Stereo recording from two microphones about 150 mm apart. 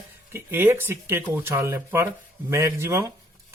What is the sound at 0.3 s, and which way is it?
Speech, 15° right (ahead or behind).